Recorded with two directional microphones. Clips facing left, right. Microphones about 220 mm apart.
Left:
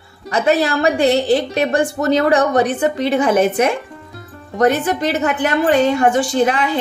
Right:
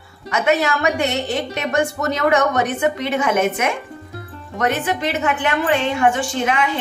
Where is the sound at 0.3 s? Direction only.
35° left (ahead or behind).